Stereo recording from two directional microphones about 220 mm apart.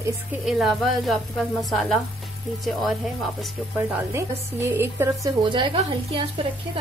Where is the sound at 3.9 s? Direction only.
10° right (ahead or behind).